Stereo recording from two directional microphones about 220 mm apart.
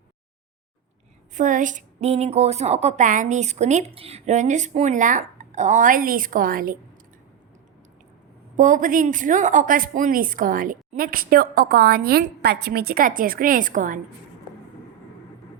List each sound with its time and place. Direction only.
1.3 s a woman's voice: 35° right (ahead or behind)
8.5 s a woman's voice: 35° right (ahead or behind)